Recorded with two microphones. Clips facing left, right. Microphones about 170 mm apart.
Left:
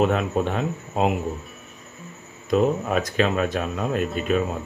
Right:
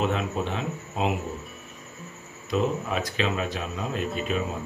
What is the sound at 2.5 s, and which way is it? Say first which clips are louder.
Speech: left 6 dB; 50° left (ahead or behind).